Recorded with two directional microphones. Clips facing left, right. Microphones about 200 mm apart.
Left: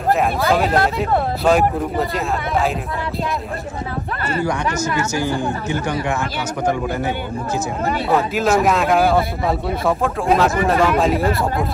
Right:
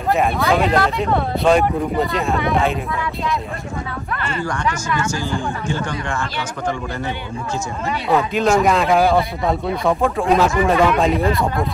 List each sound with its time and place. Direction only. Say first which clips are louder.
0.1 s speech: even; centre (ahead or behind)
4.9 s a woman's voice: left 2 dB; 20° left (ahead or behind)
8.1 s speech: right 2 dB; 5° left (ahead or behind)